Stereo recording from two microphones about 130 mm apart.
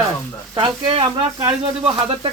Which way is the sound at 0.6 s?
40° right (ahead or behind).